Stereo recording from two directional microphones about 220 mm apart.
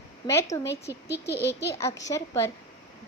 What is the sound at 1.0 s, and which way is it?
Speech, 50° left (ahead or behind).